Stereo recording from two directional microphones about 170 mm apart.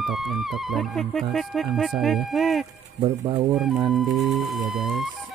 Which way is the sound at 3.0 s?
25° right (ahead or behind).